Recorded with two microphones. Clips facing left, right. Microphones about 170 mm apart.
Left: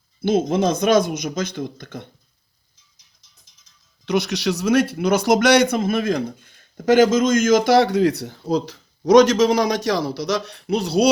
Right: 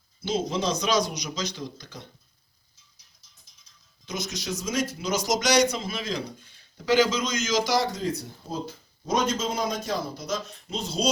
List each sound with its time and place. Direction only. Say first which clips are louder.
0.2 s speech: left 9 dB; 55° left (ahead or behind)
4.0 s speech: left 12 dB; 65° left (ahead or behind)